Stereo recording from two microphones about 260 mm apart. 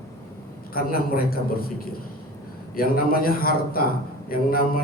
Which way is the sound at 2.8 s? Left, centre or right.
Left.